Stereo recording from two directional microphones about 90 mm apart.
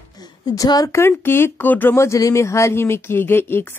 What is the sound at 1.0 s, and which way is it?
Speech, 25° left (ahead or behind).